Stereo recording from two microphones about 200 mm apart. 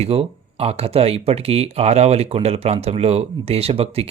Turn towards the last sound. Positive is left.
turn(degrees=-30)  # may be behind; listen again after turning